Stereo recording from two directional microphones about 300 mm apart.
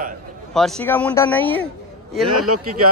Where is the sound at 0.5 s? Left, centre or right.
Centre.